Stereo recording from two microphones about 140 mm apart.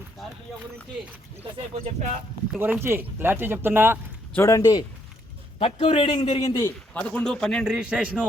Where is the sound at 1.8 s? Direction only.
55° right (ahead or behind).